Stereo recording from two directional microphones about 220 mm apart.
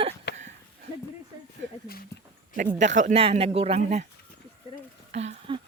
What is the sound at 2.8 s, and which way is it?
Speech, 35° right (ahead or behind).